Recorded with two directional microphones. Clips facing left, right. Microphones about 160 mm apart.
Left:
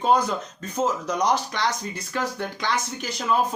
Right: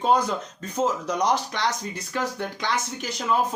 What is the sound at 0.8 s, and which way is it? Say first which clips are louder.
Speech: even; 30° right (ahead or behind).